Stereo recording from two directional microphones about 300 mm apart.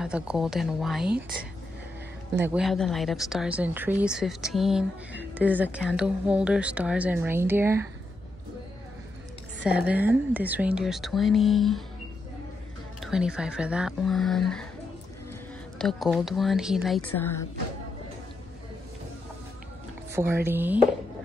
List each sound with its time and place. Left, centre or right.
0.0 s speech: centre
9.6 s speech: centre
13.0 s speech: centre
15.8 s speech: centre
20.1 s speech: centre